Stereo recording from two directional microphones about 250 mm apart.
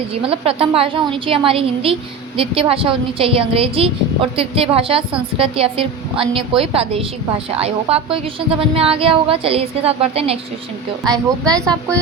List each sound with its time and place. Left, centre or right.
0.2 s a woman's voice: right